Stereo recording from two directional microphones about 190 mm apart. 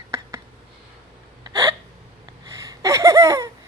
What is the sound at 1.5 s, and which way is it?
Hiccup, 15° right (ahead or behind).